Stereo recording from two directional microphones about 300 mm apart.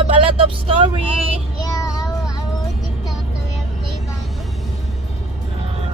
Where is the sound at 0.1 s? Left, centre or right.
Centre.